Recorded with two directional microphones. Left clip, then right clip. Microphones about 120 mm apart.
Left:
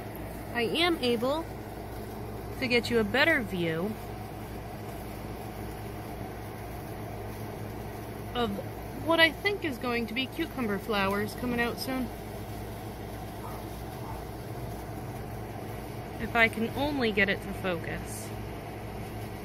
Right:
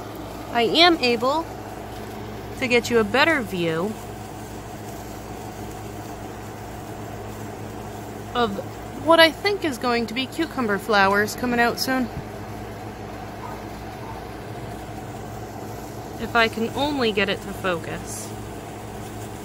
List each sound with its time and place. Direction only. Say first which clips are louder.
0.5 s speech: right 11 dB; 40° right (ahead or behind)
2.6 s speech: right 7 dB; 20° right (ahead or behind)
8.3 s speech: right 9 dB; 20° right (ahead or behind)
9.1 s speech: right 9 dB; 35° right (ahead or behind)
11.0 s speech: right 13 dB; 45° right (ahead or behind)
16.3 s speech: right 5 dB; 20° right (ahead or behind)